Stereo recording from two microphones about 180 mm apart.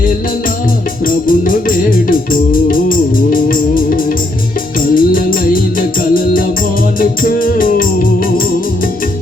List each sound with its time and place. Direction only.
1.0 s music: 50° left (ahead or behind)
7.2 s music: 50° left (ahead or behind)